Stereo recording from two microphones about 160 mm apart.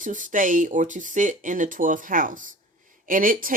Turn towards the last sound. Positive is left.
turn(degrees=-60)  # may be behind; listen again after turning